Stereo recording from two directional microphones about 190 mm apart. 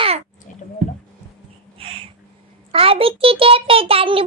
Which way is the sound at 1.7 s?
30° right (ahead or behind).